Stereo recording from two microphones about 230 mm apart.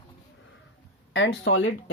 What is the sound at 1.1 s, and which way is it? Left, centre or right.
Speech, left.